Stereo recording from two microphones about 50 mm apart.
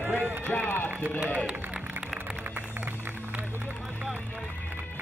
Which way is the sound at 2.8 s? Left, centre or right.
Right.